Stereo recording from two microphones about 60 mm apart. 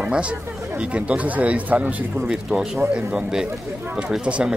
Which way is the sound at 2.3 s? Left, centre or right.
Centre.